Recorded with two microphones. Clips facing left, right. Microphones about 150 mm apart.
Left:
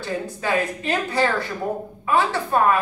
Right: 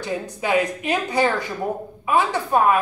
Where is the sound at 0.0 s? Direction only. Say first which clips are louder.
Even; 15° right (ahead or behind).